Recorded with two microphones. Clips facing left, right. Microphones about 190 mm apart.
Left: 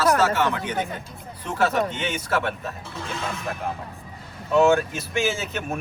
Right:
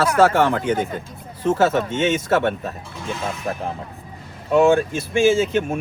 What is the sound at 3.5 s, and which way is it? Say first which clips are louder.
Speech: right 5 dB; 35° right (ahead or behind).